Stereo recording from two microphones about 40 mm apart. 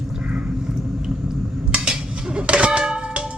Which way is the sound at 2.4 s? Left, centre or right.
Right.